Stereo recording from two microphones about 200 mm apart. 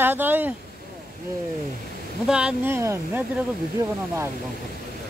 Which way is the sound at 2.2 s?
5° right (ahead or behind).